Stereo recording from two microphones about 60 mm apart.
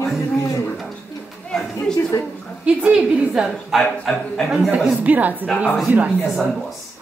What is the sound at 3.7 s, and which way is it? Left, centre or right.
Speech, centre.